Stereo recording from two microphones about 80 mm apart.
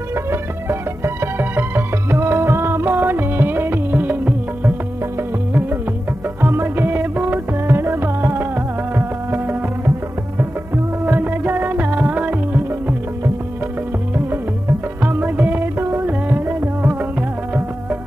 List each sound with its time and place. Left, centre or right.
0.1 s music: right
6.4 s music: right
11.1 s music: right
15.0 s music: right